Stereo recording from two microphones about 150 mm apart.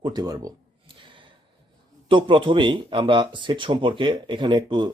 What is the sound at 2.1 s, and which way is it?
Speech, 35° right (ahead or behind).